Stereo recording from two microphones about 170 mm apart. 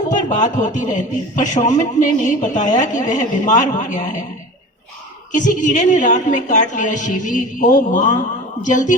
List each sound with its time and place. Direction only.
0.1 s speech: 45° left (ahead or behind)
5.3 s speech: 50° left (ahead or behind)